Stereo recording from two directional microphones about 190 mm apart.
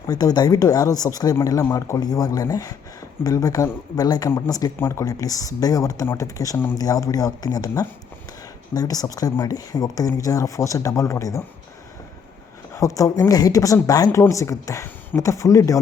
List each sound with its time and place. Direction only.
0.1 s speech: 20° left (ahead or behind)
12.7 s speech: 15° left (ahead or behind)